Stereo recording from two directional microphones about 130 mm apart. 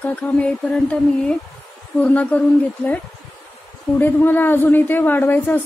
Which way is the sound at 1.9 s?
10° left (ahead or behind).